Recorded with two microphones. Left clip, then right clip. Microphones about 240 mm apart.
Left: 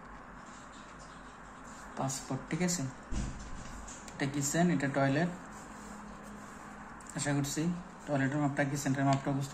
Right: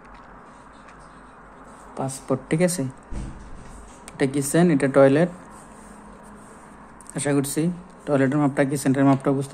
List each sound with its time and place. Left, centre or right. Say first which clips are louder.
2.0 s speech: right 11 dB; right
4.2 s speech: right 12 dB; right
7.2 s speech: right 11 dB; right